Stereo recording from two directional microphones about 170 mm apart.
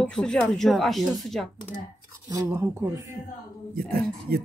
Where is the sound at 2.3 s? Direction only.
15° right (ahead or behind).